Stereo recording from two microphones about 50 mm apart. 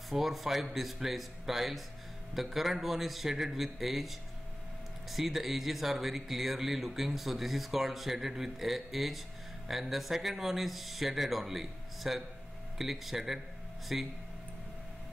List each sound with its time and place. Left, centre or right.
0.1 s speech: centre